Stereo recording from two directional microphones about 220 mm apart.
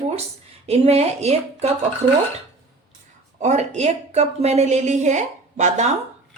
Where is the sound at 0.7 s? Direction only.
30° right (ahead or behind).